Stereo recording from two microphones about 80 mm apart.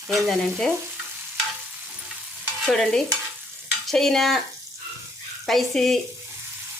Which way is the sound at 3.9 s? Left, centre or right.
Centre.